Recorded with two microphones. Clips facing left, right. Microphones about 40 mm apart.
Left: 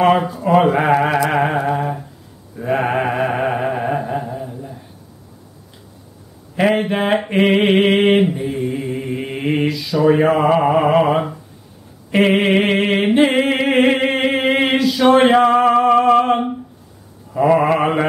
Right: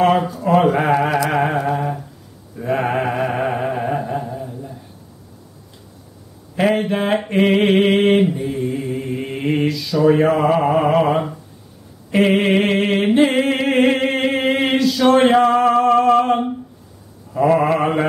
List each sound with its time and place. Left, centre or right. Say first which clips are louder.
0.0 s speech: left 1 dB; centre
2.6 s mantra: left 1 dB; centre
6.5 s mantra: left 1 dB; centre
12.1 s a sound: left 1 dB; centre
17.3 s mantra: left 1 dB; centre